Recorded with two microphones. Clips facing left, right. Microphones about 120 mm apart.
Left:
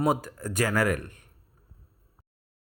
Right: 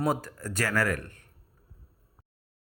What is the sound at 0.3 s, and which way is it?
Speech, 20° left (ahead or behind).